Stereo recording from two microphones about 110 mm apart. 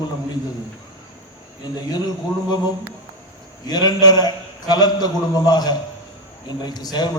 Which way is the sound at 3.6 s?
35° left (ahead or behind).